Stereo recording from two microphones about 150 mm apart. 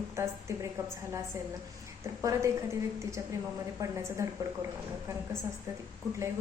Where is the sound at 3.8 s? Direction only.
20° right (ahead or behind).